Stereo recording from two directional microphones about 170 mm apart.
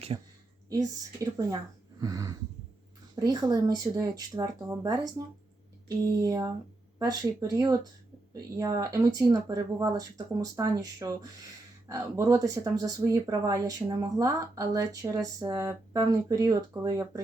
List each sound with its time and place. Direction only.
0.1 s speech: 25° right (ahead or behind)
2.0 s a sound: 20° right (ahead or behind)
3.2 s speech: 20° right (ahead or behind)